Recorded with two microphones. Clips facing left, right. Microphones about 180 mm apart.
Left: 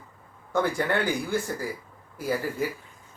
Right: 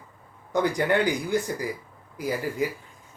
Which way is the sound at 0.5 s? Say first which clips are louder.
Right 2 dB; 15° right (ahead or behind).